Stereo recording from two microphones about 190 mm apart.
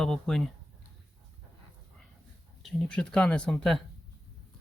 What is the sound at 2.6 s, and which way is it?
Speech, centre (ahead or behind).